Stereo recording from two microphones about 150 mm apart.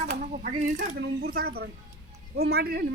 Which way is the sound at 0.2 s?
60° right (ahead or behind).